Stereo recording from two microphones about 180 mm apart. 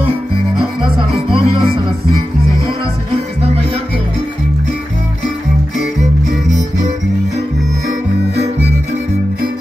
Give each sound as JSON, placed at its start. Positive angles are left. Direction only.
{"t": 0.6, "sound": "music", "side_deg": -30}